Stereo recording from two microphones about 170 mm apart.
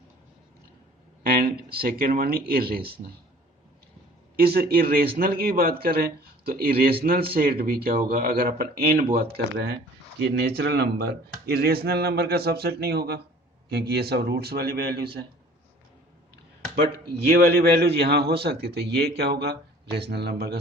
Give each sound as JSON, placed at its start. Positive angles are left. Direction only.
{"t": 1.2, "sound": "speech", "side_deg": -60}
{"t": 4.4, "sound": "speech", "side_deg": -65}
{"t": 16.8, "sound": "speech", "side_deg": -65}